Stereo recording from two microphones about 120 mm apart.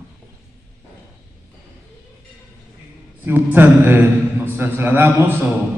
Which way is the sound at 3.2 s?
15° right (ahead or behind).